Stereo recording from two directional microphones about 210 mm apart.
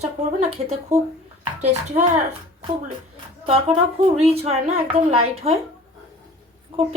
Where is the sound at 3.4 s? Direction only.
30° right (ahead or behind).